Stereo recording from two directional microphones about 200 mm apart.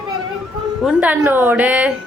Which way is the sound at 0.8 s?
5° right (ahead or behind).